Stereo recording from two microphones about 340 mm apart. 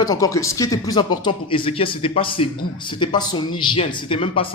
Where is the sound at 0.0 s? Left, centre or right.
Centre.